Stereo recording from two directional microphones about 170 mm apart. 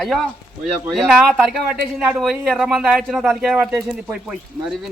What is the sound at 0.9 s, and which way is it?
A man's voice, centre (ahead or behind).